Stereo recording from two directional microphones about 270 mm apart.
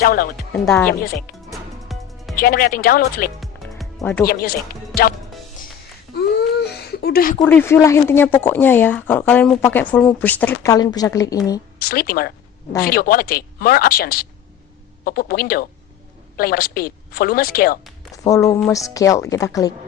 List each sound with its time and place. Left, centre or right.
0.0 s a woman's voice: left
0.5 s speech: centre
1.5 s music: centre
2.4 s a woman's voice: left
3.4 s music: centre
4.3 s a woman's voice: left
6.7 s a sound: left
7.3 s speech: centre
11.8 s a woman's voice: left
18.1 s speech: centre